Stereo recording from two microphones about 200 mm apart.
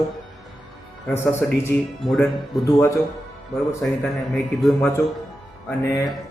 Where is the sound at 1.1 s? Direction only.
10° left (ahead or behind).